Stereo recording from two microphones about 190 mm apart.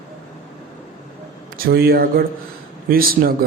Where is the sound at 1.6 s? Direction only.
55° right (ahead or behind).